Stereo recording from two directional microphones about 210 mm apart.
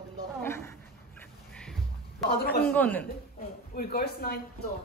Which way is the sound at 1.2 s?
5° left (ahead or behind).